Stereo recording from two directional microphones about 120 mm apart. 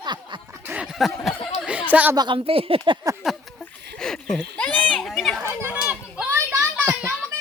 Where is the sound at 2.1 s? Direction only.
40° right (ahead or behind).